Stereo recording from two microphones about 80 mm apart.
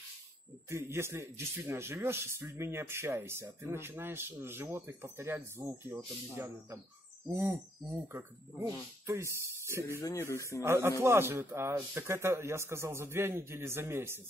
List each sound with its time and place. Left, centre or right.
0.7 s speech: right
9.8 s speech: left
10.6 s speech: right